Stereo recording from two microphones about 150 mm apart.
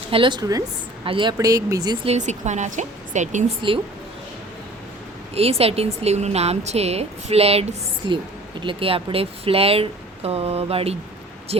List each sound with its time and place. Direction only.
0.1 s speech: 35° right (ahead or behind)
2.0 s a woman's voice: 50° right (ahead or behind)
3.6 s speech: 30° right (ahead or behind)
5.3 s a woman's voice: 40° right (ahead or behind)